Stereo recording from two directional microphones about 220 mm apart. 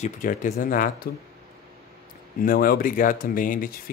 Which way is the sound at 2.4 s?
40° left (ahead or behind).